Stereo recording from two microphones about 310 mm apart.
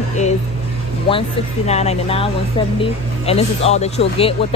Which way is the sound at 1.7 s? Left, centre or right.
Left.